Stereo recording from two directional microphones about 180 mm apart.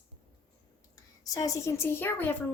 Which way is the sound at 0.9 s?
20° left (ahead or behind).